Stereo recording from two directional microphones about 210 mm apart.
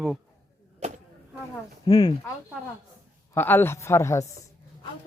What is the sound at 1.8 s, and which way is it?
Speech, 20° left (ahead or behind).